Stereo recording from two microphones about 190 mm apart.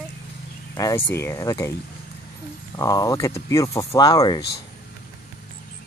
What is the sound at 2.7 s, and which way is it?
Speech, 20° left (ahead or behind).